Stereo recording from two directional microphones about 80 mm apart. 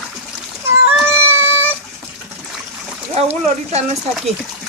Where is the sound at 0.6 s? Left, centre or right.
Right.